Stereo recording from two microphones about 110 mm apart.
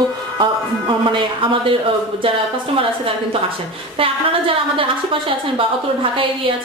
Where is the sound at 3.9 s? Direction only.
55° right (ahead or behind).